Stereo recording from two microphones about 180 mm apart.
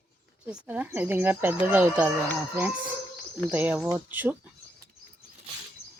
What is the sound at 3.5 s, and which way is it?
Speech, 10° right (ahead or behind).